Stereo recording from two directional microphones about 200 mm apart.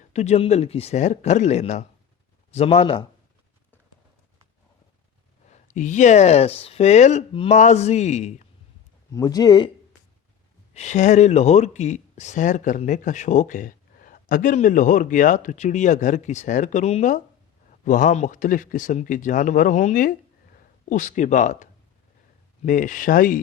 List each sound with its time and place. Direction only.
0.1 s speech: 35° left (ahead or behind)
5.5 s speech: 40° left (ahead or behind)
9.1 s speech: 20° left (ahead or behind)
10.8 s speech: 35° left (ahead or behind)